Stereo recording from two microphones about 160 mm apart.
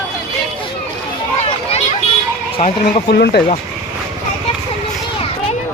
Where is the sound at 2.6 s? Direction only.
45° left (ahead or behind).